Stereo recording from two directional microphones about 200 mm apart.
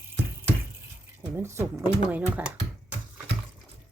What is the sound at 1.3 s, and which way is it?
Speech, 15° right (ahead or behind).